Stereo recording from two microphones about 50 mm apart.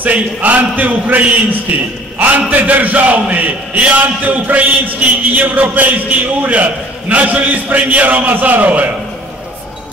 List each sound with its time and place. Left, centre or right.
0.0 s a man's voice: right